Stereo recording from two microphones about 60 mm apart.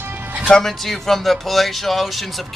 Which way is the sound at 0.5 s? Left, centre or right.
Centre.